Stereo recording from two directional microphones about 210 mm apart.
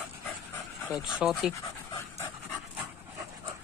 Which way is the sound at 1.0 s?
Centre (ahead or behind).